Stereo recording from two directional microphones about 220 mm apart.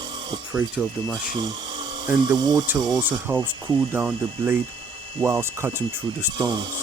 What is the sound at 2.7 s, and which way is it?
Speech, 15° right (ahead or behind).